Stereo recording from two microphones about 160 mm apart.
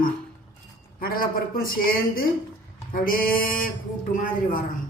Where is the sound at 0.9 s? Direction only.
65° left (ahead or behind).